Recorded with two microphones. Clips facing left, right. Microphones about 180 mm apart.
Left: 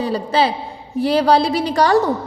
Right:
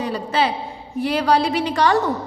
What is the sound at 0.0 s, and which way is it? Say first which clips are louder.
A woman's voice: left 3 dB; 35° left (ahead or behind).